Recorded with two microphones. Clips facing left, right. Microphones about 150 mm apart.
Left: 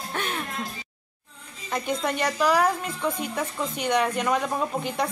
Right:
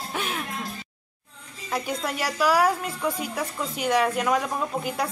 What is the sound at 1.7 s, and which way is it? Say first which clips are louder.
A woman's voice: left 2 dB; 5° right (ahead or behind).